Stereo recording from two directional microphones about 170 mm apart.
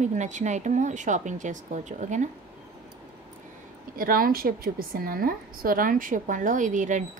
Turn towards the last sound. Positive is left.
turn(degrees=-50)  # may be behind; listen again after turning